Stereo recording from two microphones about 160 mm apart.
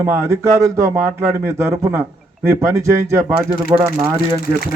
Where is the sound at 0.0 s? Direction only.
15° right (ahead or behind).